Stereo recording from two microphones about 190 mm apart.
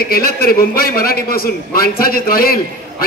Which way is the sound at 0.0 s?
50° left (ahead or behind).